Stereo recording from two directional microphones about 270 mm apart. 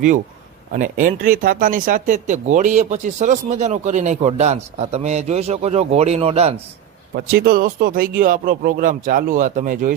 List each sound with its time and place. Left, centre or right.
0.7 s speech: right
7.3 s speech: right